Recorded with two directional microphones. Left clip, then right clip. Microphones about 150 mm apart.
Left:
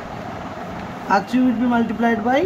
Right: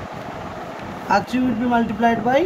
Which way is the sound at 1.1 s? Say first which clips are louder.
Left 1 dB; 30° right (ahead or behind).